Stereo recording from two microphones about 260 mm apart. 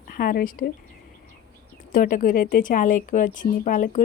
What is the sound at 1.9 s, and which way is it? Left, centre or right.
Speech, left.